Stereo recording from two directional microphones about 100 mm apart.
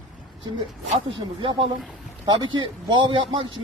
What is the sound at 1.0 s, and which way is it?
A man's voice, 60° right (ahead or behind).